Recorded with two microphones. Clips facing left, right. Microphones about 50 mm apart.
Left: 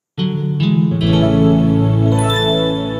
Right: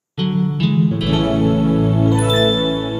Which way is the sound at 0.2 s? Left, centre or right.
Centre.